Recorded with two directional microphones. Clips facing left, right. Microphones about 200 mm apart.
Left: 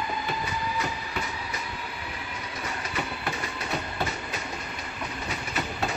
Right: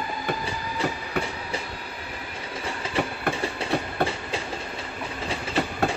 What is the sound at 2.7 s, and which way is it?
Train, 30° right (ahead or behind).